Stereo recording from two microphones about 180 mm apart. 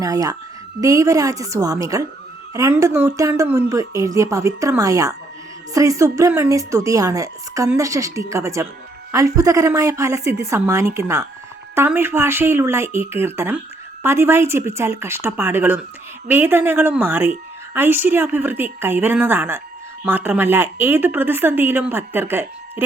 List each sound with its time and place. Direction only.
0.0 s a woman's voice: 20° right (ahead or behind)